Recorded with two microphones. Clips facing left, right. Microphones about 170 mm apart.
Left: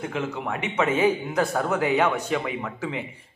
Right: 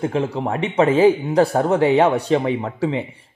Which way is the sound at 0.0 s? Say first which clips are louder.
Right 8 dB; 35° right (ahead or behind).